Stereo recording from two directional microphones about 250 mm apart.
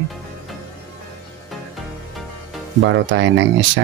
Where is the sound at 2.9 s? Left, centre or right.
Right.